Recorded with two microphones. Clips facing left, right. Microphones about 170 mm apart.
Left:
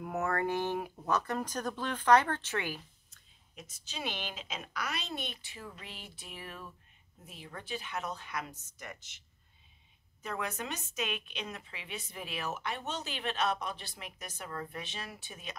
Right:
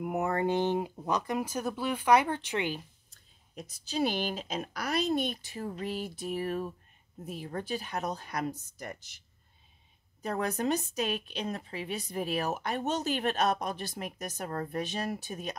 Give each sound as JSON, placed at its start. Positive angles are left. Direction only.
{"t": 0.0, "sound": "speech", "side_deg": -20}
{"t": 3.1, "sound": "a woman's voice", "side_deg": -35}
{"t": 10.2, "sound": "a woman's voice", "side_deg": -40}